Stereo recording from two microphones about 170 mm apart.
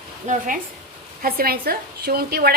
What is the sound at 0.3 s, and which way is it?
A woman's voice, 50° right (ahead or behind).